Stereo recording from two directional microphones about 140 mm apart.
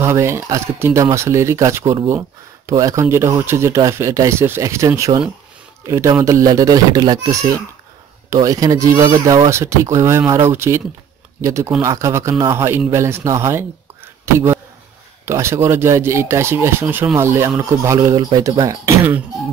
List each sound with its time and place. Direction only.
0.0 s a man's voice: 20° right (ahead or behind)